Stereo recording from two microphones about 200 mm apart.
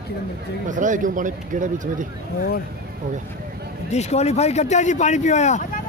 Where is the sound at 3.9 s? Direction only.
35° left (ahead or behind).